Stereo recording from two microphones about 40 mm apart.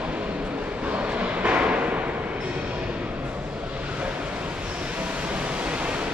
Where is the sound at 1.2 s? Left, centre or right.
Right.